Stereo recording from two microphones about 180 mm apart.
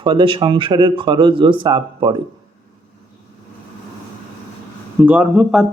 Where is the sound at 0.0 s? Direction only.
25° right (ahead or behind).